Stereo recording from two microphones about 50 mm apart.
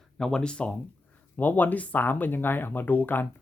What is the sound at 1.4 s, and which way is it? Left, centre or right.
Speech, left.